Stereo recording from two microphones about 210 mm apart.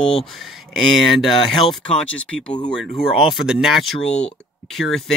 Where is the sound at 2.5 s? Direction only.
20° left (ahead or behind).